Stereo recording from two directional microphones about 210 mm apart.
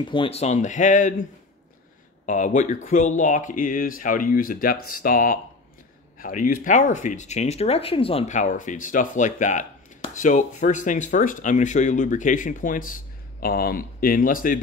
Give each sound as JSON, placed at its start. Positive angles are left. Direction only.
{"t": 0.1, "sound": "speech", "side_deg": 25}
{"t": 2.2, "sound": "speech", "side_deg": 35}